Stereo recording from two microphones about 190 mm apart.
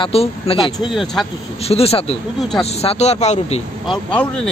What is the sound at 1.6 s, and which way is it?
Speech, 30° left (ahead or behind).